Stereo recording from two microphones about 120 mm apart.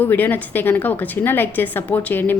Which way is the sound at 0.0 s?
15° left (ahead or behind).